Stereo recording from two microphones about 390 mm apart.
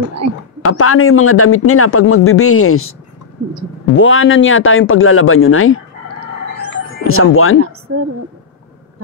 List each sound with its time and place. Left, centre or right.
0.2 s a woman's voice: right
0.6 s speech: left
3.9 s speech: left
7.1 s speech: left
7.9 s a woman's voice: right